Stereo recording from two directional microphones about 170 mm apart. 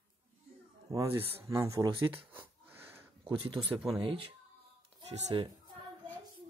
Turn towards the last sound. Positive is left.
turn(degrees=-40)  # may be behind; listen again after turning